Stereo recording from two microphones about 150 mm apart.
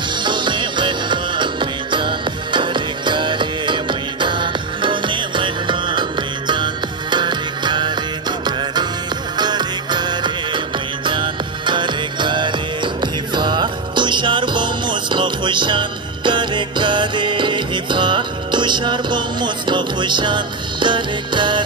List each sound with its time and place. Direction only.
0.2 s music: 30° right (ahead or behind)
9.4 s music: 30° right (ahead or behind)